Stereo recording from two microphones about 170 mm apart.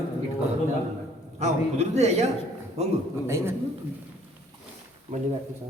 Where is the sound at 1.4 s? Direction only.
40° right (ahead or behind).